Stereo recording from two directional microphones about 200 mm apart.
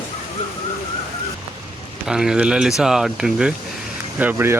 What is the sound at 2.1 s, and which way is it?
Speech, 5° right (ahead or behind).